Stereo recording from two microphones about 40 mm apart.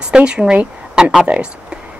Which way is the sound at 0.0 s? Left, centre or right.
Right.